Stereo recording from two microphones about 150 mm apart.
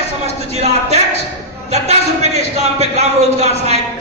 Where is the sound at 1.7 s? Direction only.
45° right (ahead or behind).